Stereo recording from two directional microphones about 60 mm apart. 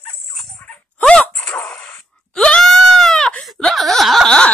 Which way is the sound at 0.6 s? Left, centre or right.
Left.